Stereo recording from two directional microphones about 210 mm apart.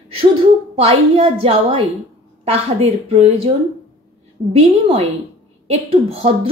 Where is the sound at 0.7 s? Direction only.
25° right (ahead or behind).